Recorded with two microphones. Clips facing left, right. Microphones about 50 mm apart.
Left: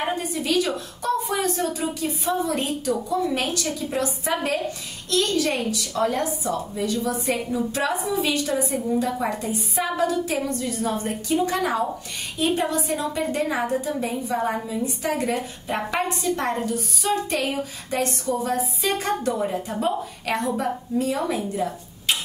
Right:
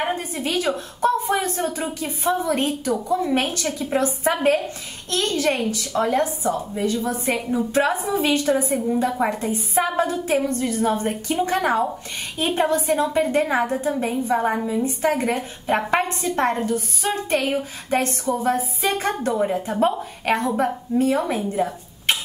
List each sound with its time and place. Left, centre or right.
0.0 s a woman's voice: right
8.7 s a woman's voice: centre
9.2 s a woman's voice: right